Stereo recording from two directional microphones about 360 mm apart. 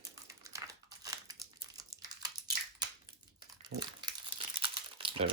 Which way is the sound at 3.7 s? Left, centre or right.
Right.